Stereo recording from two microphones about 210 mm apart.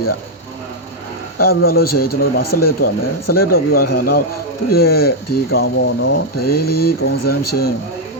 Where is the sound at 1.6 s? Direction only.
45° left (ahead or behind).